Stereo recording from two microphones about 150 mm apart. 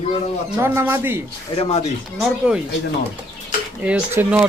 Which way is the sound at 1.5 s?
45° left (ahead or behind).